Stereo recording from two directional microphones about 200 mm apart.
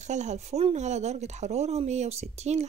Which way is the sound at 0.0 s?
35° right (ahead or behind).